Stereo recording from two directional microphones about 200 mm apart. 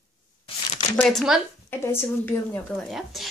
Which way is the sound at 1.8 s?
10° left (ahead or behind).